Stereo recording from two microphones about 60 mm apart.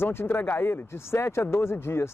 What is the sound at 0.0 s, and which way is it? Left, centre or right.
Speech, left.